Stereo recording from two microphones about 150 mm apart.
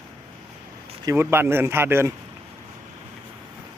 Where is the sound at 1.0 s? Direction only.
15° right (ahead or behind).